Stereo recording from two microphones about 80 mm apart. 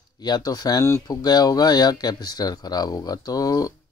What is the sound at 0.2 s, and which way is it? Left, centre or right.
Speech, left.